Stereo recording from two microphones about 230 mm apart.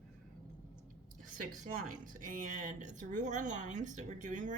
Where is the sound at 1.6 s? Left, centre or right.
Right.